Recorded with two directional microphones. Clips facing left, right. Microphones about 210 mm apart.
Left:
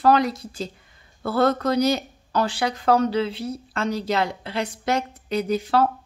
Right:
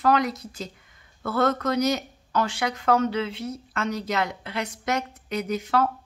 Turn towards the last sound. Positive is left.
turn(degrees=30)  # may be behind; listen again after turning